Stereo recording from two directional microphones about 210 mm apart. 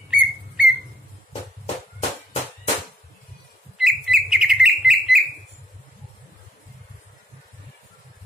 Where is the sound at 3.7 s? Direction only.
Centre (ahead or behind).